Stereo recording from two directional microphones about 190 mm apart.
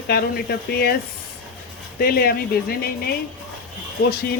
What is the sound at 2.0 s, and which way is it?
Speech, 55° left (ahead or behind).